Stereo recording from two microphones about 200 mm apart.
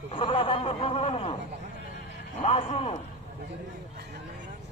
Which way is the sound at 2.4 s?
25° left (ahead or behind).